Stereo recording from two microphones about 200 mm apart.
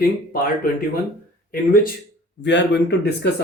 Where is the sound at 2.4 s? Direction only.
60° left (ahead or behind).